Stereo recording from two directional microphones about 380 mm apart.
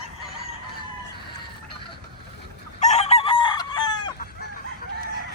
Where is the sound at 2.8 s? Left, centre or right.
Centre.